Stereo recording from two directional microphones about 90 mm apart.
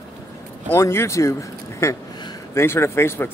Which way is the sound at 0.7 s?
30° left (ahead or behind).